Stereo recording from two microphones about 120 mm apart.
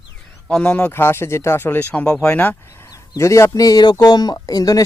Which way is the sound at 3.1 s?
25° left (ahead or behind).